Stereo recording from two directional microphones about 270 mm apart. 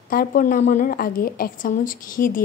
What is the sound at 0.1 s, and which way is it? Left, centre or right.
A woman's voice, left.